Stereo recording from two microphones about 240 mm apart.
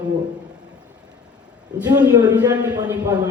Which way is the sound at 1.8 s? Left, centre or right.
Centre.